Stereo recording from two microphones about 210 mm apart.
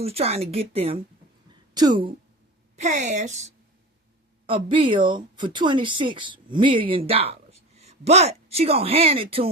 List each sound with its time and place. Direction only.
0.0 s speech: 30° right (ahead or behind)
2.7 s a woman's voice: 35° right (ahead or behind)